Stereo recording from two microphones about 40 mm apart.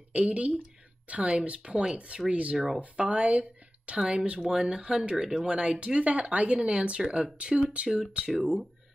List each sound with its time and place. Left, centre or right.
0.1 s speech: right
2.5 s speech: centre
3.1 s speech: right
3.9 s speech: right
4.4 s speech: centre
5.5 s speech: right
8.3 s speech: centre